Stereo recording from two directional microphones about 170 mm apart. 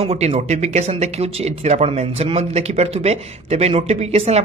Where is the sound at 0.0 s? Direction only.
35° right (ahead or behind).